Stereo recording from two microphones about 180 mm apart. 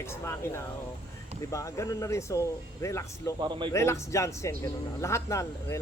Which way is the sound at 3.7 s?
15° left (ahead or behind).